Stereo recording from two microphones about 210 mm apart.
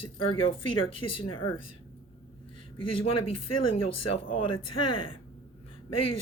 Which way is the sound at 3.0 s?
25° left (ahead or behind).